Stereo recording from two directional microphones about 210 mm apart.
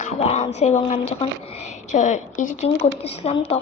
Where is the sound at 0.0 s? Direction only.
30° left (ahead or behind).